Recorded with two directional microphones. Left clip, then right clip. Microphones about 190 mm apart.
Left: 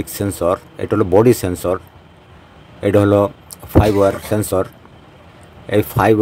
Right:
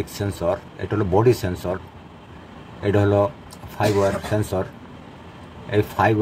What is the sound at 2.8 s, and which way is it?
Speech, 55° left (ahead or behind).